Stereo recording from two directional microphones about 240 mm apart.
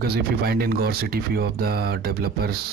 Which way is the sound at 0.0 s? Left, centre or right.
Right.